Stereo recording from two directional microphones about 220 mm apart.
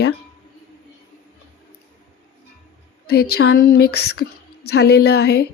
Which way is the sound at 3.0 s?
45° left (ahead or behind).